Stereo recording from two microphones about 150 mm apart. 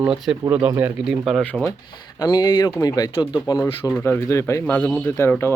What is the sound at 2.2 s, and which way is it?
Speech, 30° left (ahead or behind).